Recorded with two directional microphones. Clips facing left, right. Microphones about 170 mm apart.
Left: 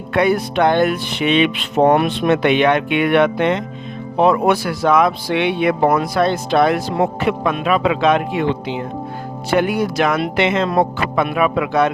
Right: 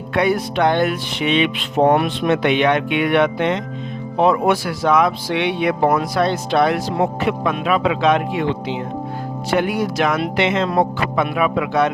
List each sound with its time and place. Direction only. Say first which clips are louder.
0.1 s music: left 2 dB; 55° left (ahead or behind)
4.2 s speech: left 1 dB; 60° left (ahead or behind)
7.2 s music: left 1 dB; 55° left (ahead or behind)
9.5 s music: left 2 dB; 55° left (ahead or behind)